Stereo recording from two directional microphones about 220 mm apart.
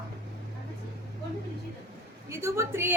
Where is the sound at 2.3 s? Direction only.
10° right (ahead or behind).